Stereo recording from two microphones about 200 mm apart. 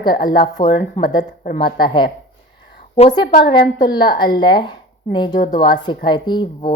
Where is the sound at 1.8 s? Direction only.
25° left (ahead or behind).